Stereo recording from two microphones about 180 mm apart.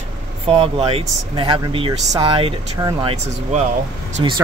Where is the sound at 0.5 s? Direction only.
35° right (ahead or behind).